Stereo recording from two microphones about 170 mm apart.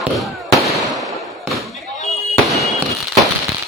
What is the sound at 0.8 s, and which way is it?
Fireworks, centre (ahead or behind).